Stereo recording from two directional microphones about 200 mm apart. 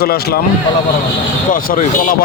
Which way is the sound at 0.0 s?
50° left (ahead or behind).